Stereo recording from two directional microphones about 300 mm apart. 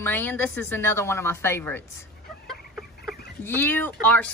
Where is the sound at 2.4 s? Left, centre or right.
Centre.